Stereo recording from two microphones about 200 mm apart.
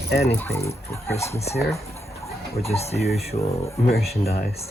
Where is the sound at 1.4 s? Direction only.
30° left (ahead or behind).